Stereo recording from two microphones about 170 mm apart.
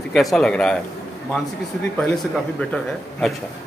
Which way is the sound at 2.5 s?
5° left (ahead or behind).